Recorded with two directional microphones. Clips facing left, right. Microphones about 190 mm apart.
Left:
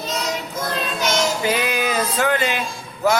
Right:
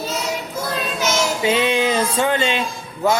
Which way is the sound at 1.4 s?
25° right (ahead or behind).